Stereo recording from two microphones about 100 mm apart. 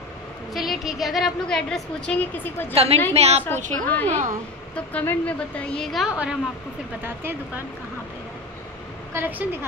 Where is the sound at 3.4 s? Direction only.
20° left (ahead or behind).